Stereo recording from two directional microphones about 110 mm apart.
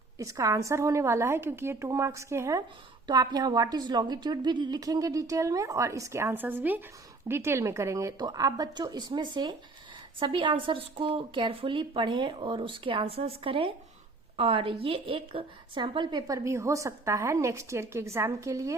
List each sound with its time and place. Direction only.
0.2 s a woman's voice: 30° right (ahead or behind)